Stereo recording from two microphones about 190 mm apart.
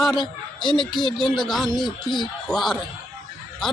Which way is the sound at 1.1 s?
Centre (ahead or behind).